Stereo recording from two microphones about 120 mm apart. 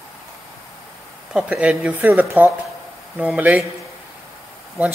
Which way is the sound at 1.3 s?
10° right (ahead or behind).